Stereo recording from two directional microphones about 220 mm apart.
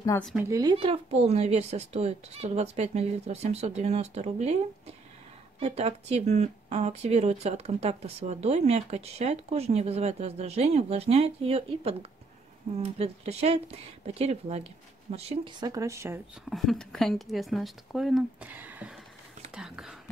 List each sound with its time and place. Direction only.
0.4 s speech: 15° right (ahead or behind)
5.6 s speech: 30° right (ahead or behind); by 16.2 s 10° right (ahead or behind)
16.4 s speech: centre (ahead or behind)